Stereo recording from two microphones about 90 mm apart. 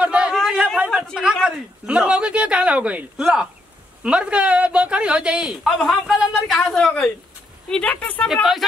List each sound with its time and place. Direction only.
0.0 s chatter: 10° right (ahead or behind)
0.3 s chatter: centre (ahead or behind)
0.8 s a sound: 10° left (ahead or behind)
1.3 s speech: 5° right (ahead or behind)
5.6 s speech: centre (ahead or behind); by 8.3 s 15° left (ahead or behind)
8.3 s speech: centre (ahead or behind)